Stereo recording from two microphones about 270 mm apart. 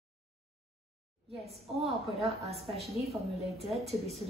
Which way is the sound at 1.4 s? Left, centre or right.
Centre.